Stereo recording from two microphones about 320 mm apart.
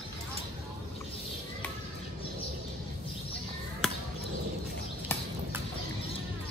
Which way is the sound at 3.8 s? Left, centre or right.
Centre.